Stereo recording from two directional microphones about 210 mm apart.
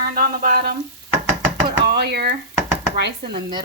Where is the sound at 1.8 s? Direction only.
50° right (ahead or behind).